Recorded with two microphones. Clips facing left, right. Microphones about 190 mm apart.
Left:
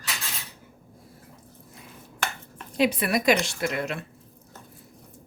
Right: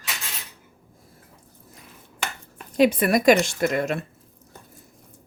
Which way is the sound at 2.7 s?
45° right (ahead or behind).